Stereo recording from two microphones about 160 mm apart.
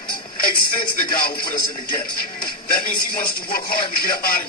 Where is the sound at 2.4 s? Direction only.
60° left (ahead or behind).